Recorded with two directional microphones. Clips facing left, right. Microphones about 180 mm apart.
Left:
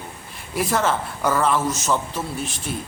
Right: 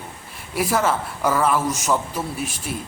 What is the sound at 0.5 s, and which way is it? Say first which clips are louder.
A woman's voice: right 1 dB; 5° right (ahead or behind).